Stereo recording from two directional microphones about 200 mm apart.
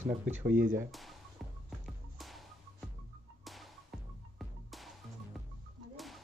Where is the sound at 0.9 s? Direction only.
Centre (ahead or behind).